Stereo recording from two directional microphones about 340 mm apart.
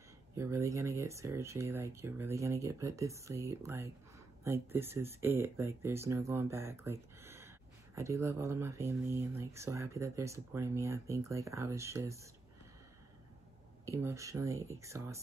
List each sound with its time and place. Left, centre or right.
0.4 s speech: centre
13.8 s speech: centre